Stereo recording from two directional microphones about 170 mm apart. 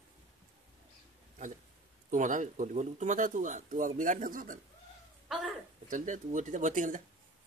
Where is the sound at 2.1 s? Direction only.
50° right (ahead or behind).